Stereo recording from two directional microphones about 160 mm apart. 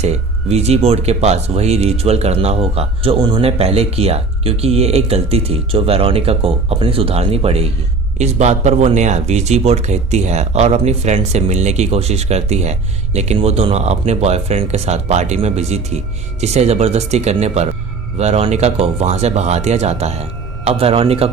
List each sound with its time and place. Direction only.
0.0 s a man's voice: 40° right (ahead or behind)